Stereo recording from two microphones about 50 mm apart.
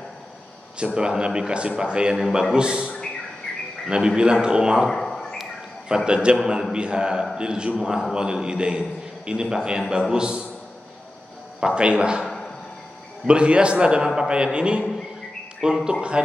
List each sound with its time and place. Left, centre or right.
0.7 s a man's voice: centre
4.8 s a sound: centre
5.9 s a man's voice: centre
11.6 s speech: centre
13.3 s a man's voice: right